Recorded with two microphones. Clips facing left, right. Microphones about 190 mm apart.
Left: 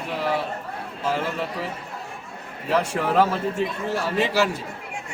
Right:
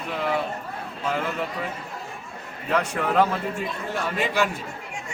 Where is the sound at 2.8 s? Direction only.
5° left (ahead or behind).